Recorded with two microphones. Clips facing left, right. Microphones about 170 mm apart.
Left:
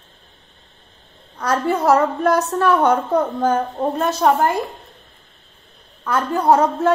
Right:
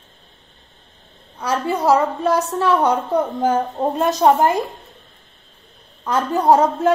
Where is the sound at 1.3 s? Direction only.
10° right (ahead or behind).